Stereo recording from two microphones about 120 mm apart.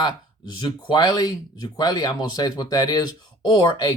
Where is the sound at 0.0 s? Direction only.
35° left (ahead or behind).